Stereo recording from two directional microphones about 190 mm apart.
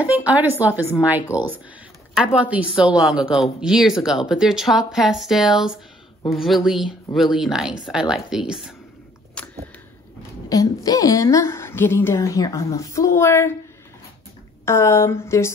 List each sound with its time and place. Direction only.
0.0 s speech: 5° right (ahead or behind)
10.5 s a woman's voice: 20° left (ahead or behind)
14.6 s a woman's voice: 15° left (ahead or behind)